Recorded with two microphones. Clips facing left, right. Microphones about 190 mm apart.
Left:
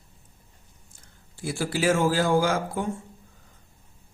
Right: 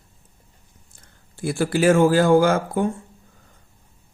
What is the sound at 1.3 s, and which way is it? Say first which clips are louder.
Speech: right 6 dB; 55° right (ahead or behind).